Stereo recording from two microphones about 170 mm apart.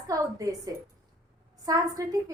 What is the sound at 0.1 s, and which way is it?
A woman's voice, 20° right (ahead or behind).